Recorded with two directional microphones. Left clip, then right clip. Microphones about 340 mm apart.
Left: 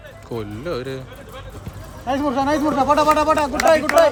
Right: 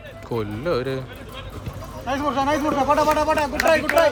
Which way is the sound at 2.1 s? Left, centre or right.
Left.